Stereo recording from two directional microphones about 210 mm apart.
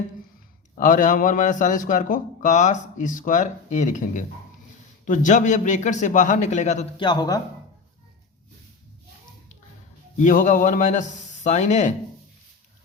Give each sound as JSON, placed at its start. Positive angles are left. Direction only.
{"t": 0.8, "sound": "a man's voice", "side_deg": 40}
{"t": 7.0, "sound": "speech", "side_deg": 20}
{"t": 10.2, "sound": "a man's voice", "side_deg": 35}